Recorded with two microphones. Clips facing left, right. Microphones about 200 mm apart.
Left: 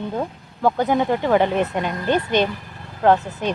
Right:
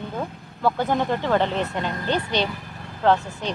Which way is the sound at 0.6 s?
15° left (ahead or behind).